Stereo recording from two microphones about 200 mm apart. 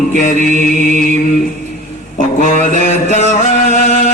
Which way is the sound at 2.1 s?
40° left (ahead or behind).